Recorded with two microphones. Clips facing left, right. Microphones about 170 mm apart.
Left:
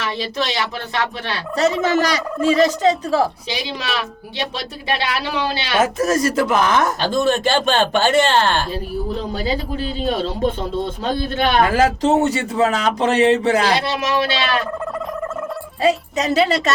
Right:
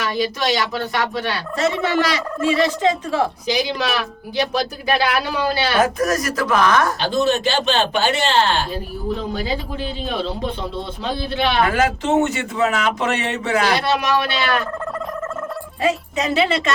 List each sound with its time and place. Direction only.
0.2 s turkey: 30° left (ahead or behind)
4.9 s speech: 25° left (ahead or behind)
7.0 s speech: 50° left (ahead or behind)
9.3 s turkey: 35° left (ahead or behind)
11.0 s speech: 45° left (ahead or behind)
11.6 s turkey: 35° left (ahead or behind)
14.3 s speech: 25° left (ahead or behind)
15.8 s turkey: 35° left (ahead or behind)